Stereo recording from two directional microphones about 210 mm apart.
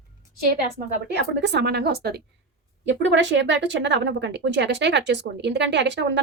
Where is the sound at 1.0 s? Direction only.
55° right (ahead or behind).